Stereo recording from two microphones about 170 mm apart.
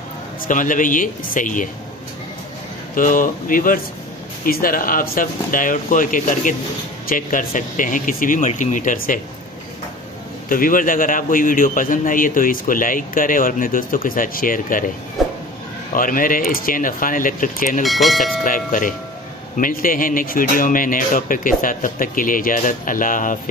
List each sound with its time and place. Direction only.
0.5 s a man's voice: 50° left (ahead or behind)
2.9 s a man's voice: 50° left (ahead or behind)
10.5 s a man's voice: 55° left (ahead or behind)
15.2 s a sound: centre (ahead or behind)
15.9 s a man's voice: 55° left (ahead or behind)
17.8 s speech: centre (ahead or behind)
18.4 s a man's voice: 50° left (ahead or behind)